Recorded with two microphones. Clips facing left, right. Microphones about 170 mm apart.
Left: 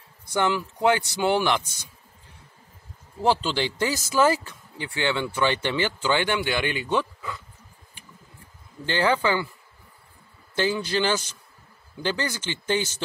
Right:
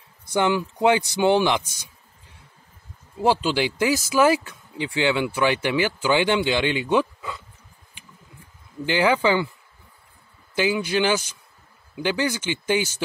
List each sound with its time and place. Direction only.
0.3 s speech: 20° right (ahead or behind)
3.2 s speech: 10° right (ahead or behind)
8.8 s speech: 10° right (ahead or behind)
10.5 s speech: 10° right (ahead or behind)